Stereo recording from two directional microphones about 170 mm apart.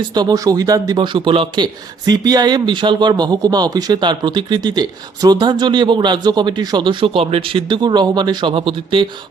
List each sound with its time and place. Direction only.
0.1 s speech: 25° right (ahead or behind)